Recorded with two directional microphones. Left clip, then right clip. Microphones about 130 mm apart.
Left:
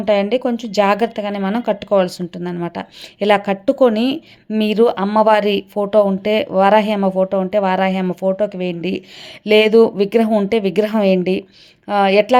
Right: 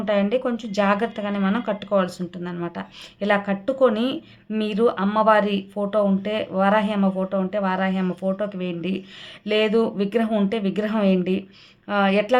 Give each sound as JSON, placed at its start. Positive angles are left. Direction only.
{"t": 0.0, "sound": "a woman's voice", "side_deg": 40}
{"t": 8.0, "sound": "a woman's voice", "side_deg": 35}